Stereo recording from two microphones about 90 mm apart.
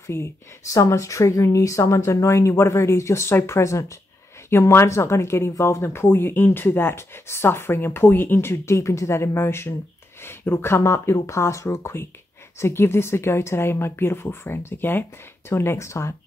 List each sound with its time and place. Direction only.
0.0 s speech: 30° left (ahead or behind)